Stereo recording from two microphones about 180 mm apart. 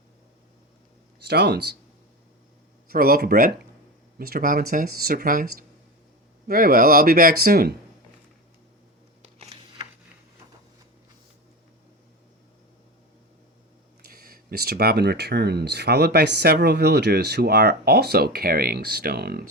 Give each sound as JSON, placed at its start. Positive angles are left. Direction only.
{"t": 1.2, "sound": "speech", "side_deg": -65}
{"t": 2.9, "sound": "speech", "side_deg": -55}
{"t": 9.2, "sound": "a sound", "side_deg": -35}
{"t": 14.0, "sound": "speech", "side_deg": -55}